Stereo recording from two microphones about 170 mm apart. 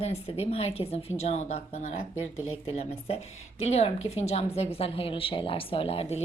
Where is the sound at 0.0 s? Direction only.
35° left (ahead or behind).